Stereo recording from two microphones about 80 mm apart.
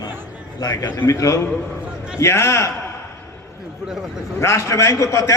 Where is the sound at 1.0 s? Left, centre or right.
Left.